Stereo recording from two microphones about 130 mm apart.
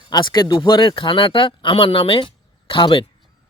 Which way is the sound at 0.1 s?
35° left (ahead or behind).